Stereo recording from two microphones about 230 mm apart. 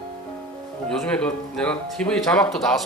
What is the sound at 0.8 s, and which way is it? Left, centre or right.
Speech, centre.